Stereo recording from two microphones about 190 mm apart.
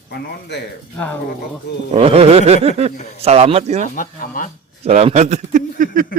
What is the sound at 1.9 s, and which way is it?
Speech, 30° right (ahead or behind).